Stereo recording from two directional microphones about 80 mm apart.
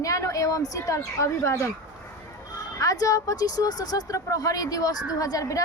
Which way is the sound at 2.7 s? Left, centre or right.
Left.